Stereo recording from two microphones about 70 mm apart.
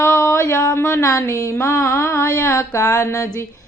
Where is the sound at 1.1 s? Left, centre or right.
Left.